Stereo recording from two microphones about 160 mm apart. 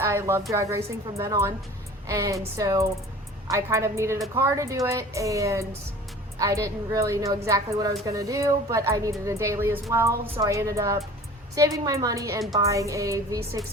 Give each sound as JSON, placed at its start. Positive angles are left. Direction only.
{"t": 0.0, "sound": "a woman's voice", "side_deg": -15}